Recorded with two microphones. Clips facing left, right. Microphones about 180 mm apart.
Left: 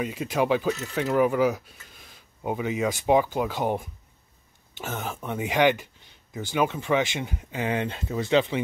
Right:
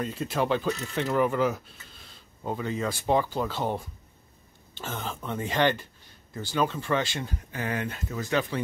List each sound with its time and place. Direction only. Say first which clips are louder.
0.0 s speech: left 3 dB; 10° left (ahead or behind)